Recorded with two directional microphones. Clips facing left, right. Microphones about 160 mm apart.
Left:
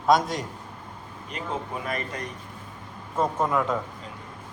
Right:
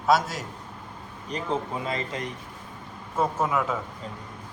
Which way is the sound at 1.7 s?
25° right (ahead or behind).